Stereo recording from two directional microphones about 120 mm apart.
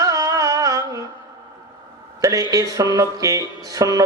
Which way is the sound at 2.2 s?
30° right (ahead or behind).